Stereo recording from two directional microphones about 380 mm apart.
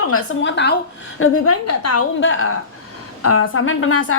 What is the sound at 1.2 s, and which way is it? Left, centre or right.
A woman's voice, left.